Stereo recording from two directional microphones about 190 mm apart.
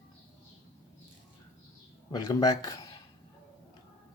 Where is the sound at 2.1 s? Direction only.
20° left (ahead or behind).